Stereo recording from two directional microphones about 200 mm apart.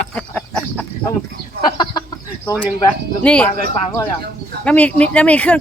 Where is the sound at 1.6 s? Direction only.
20° left (ahead or behind).